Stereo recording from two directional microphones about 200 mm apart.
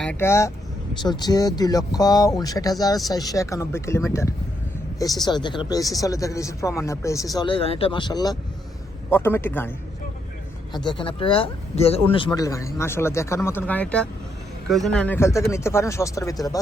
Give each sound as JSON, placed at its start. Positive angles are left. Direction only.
{"t": 0.0, "sound": "speech", "side_deg": 10}
{"t": 10.7, "sound": "speech", "side_deg": 20}